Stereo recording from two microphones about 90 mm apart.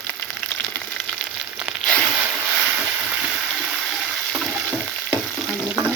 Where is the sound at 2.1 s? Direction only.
5° right (ahead or behind).